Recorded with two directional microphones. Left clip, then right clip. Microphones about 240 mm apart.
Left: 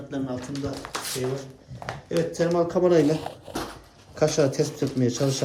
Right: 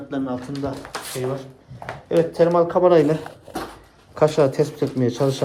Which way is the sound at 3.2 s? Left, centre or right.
Centre.